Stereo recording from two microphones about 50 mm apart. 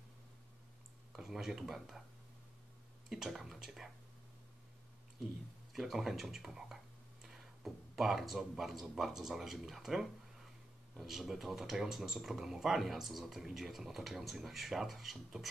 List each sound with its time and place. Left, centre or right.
1.1 s speech: centre
3.1 s speech: centre
5.2 s speech: centre